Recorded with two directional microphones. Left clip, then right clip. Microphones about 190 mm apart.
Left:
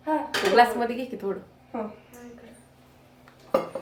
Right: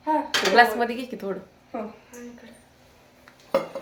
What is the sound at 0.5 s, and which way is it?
Speech, 20° right (ahead or behind).